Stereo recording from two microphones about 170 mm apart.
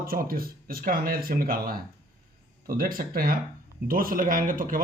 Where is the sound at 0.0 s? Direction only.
55° right (ahead or behind).